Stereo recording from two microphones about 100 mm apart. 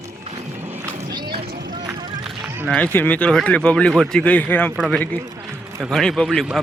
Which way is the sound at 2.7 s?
15° left (ahead or behind).